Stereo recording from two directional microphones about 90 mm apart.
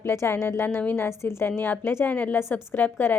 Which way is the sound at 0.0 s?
30° left (ahead or behind).